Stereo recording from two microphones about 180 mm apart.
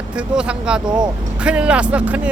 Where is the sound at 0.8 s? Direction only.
25° right (ahead or behind).